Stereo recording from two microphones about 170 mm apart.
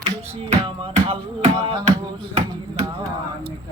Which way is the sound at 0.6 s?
35° right (ahead or behind).